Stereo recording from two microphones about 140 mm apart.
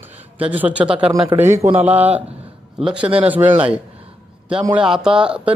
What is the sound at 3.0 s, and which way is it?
Speech, 40° right (ahead or behind).